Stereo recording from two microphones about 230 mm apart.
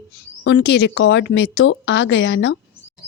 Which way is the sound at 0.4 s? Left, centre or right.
Left.